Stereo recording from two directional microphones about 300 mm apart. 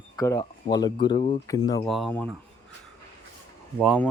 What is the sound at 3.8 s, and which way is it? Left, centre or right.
Speech, centre.